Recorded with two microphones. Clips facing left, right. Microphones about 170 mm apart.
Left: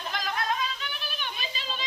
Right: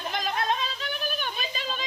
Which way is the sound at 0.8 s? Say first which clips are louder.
Right 6 dB; 45° right (ahead or behind).